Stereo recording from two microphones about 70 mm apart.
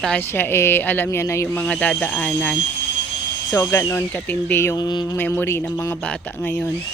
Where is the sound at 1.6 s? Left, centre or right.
Centre.